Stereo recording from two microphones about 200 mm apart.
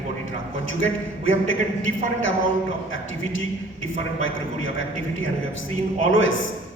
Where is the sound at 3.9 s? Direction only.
75° left (ahead or behind).